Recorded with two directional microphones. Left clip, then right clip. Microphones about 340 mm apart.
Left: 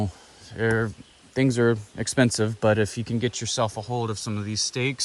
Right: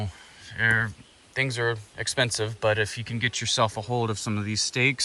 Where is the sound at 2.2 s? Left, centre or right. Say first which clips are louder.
Left 4 dB; left; by 5.0 s centre.